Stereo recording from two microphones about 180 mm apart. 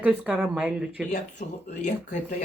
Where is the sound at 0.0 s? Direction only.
10° right (ahead or behind).